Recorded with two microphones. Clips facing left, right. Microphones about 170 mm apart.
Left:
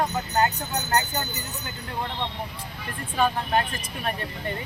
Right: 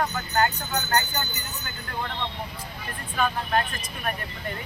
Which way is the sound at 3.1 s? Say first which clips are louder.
Left 2 dB; 25° left (ahead or behind).